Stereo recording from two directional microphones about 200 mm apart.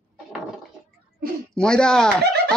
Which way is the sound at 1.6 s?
5° left (ahead or behind).